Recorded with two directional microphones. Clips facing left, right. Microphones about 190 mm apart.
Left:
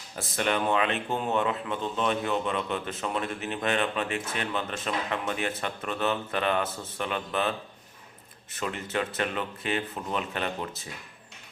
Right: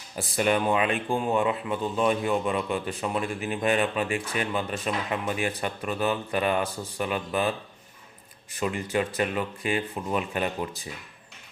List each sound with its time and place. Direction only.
0.2 s speech: 10° right (ahead or behind)
8.6 s speech: 10° right (ahead or behind)